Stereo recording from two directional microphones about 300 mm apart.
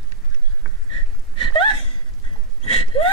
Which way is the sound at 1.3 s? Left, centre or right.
Centre.